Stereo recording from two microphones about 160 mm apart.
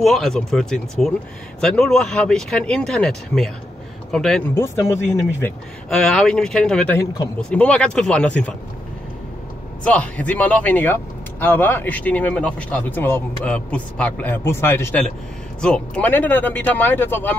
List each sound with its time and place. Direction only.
0.0 s speech: centre (ahead or behind)
4.6 s speech: 20° left (ahead or behind)
5.9 s speech: 5° left (ahead or behind)
9.8 s speech: 10° left (ahead or behind)